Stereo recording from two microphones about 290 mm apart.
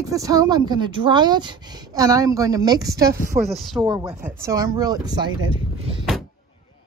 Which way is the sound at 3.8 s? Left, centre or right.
Centre.